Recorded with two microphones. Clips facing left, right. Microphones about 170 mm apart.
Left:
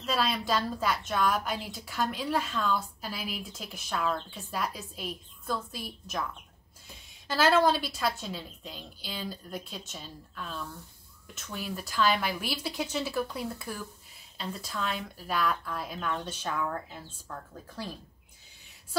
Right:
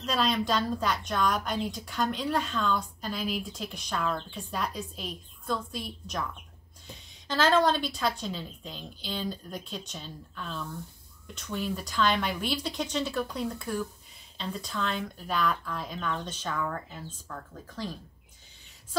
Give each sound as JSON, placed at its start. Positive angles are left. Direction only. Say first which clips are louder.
{"t": 0.0, "sound": "a woman's voice", "louder": "right 2 dB", "side_deg": 5}
{"t": 7.2, "sound": "a woman's voice", "louder": "even", "side_deg": 10}